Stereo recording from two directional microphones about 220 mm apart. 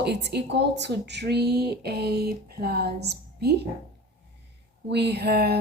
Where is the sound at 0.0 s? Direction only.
50° right (ahead or behind).